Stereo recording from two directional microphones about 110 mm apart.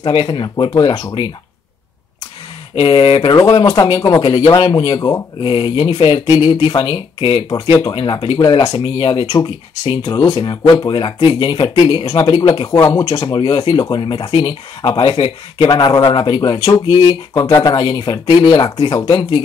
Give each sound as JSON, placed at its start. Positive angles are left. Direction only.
{"t": 0.0, "sound": "speech", "side_deg": 50}
{"t": 2.7, "sound": "speech", "side_deg": 50}
{"t": 3.3, "sound": "a man's voice", "side_deg": 35}
{"t": 5.4, "sound": "speech", "side_deg": 50}
{"t": 10.0, "sound": "a man's voice", "side_deg": 30}
{"t": 12.7, "sound": "speech", "side_deg": 25}
{"t": 13.3, "sound": "a man's voice", "side_deg": 45}